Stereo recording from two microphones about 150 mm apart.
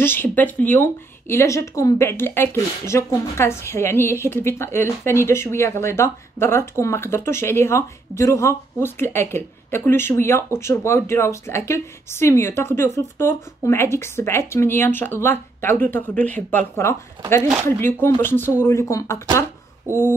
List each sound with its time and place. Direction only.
0.0 s speech: 15° left (ahead or behind)